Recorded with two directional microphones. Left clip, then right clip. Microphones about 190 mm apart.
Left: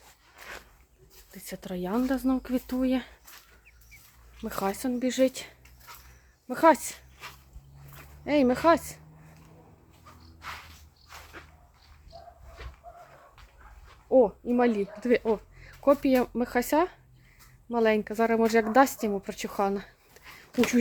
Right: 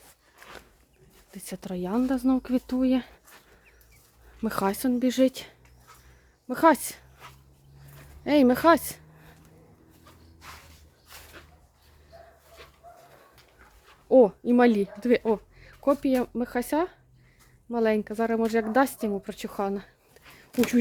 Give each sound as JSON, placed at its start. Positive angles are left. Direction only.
{"t": 1.3, "sound": "speech", "side_deg": -25}
{"t": 4.4, "sound": "speech", "side_deg": -40}
{"t": 8.2, "sound": "a woman's voice", "side_deg": -35}
{"t": 14.1, "sound": "a sound", "side_deg": -50}
{"t": 15.0, "sound": "a woman's voice", "side_deg": -25}
{"t": 20.2, "sound": "a sound", "side_deg": -5}
{"t": 20.5, "sound": "speech", "side_deg": -50}